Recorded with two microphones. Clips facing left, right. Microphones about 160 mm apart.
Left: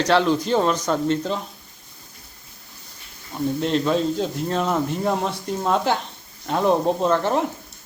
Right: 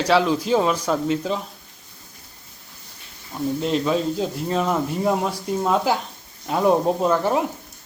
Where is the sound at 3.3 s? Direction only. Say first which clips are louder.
Left 1 dB; centre (ahead or behind).